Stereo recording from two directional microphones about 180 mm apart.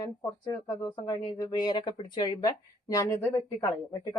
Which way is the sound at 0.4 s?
25° left (ahead or behind).